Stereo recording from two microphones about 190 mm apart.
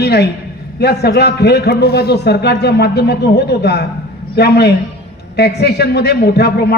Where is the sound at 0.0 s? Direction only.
60° left (ahead or behind).